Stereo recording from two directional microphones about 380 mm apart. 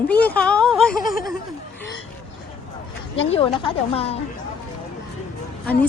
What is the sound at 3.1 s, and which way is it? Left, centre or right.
Speech, centre.